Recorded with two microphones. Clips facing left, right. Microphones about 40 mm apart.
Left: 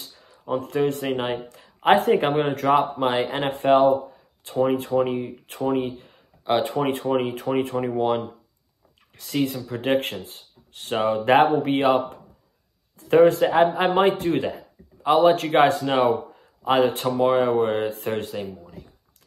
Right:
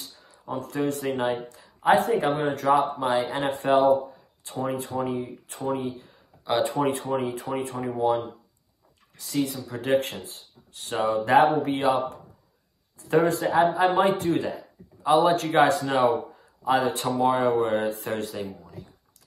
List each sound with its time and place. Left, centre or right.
0.2 s speech: left
17.2 s speech: left